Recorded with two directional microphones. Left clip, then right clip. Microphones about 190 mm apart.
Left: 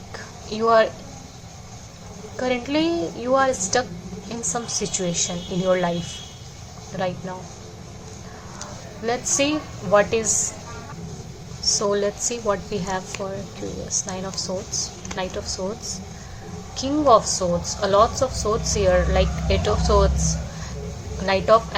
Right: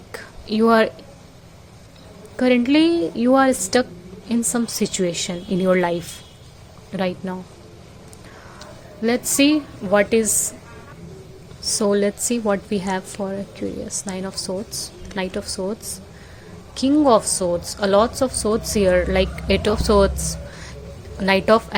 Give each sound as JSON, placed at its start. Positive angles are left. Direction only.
{"t": 0.1, "sound": "a sound", "side_deg": -45}
{"t": 2.3, "sound": "a woman's voice", "side_deg": -50}
{"t": 6.9, "sound": "a woman's voice", "side_deg": -50}
{"t": 9.0, "sound": "a woman's voice", "side_deg": -50}
{"t": 11.7, "sound": "a woman's voice", "side_deg": -40}
{"t": 16.7, "sound": "a woman's voice", "side_deg": -40}